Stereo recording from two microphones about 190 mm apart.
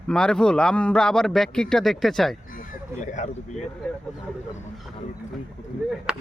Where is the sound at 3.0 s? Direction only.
40° left (ahead or behind).